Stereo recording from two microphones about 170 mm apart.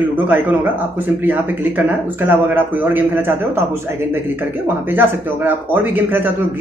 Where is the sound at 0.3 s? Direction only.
10° right (ahead or behind).